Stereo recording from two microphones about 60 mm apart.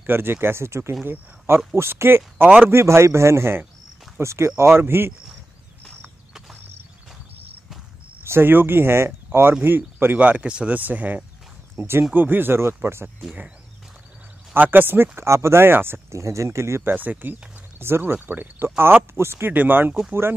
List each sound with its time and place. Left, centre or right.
0.0 s speech: right
2.7 s a man's voice: right
8.2 s speech: right
10.1 s speech: right
11.7 s speech: right
14.5 s speech: right
16.1 s a man's voice: right
16.9 s speech: right
18.2 s a man's voice: right
19.5 s speech: right